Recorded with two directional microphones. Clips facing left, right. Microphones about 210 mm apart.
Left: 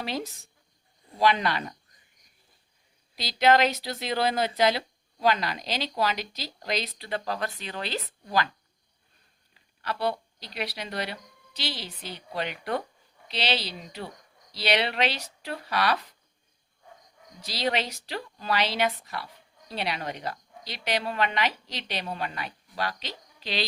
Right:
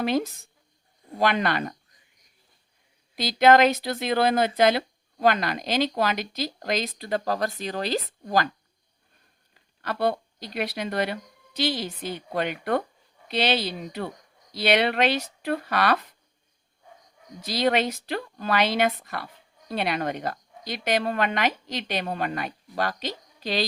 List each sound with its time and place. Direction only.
0.0 s speech: 55° right (ahead or behind)
3.2 s speech: 50° right (ahead or behind)
9.8 s speech: 50° right (ahead or behind)
17.4 s speech: 50° right (ahead or behind)